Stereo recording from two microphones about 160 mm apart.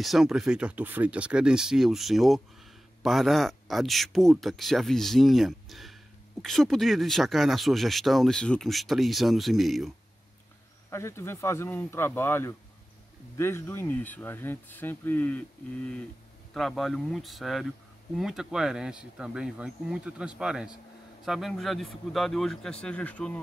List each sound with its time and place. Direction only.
0.0 s speech: centre (ahead or behind)
10.9 s speech: 15° left (ahead or behind)
16.5 s speech: centre (ahead or behind)